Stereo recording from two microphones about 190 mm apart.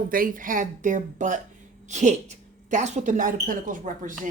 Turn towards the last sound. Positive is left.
turn(degrees=-45)  # may be behind; listen again after turning